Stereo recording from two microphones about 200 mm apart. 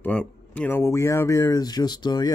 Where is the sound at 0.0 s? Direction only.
5° left (ahead or behind).